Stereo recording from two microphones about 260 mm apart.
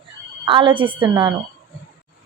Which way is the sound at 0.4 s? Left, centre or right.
Centre.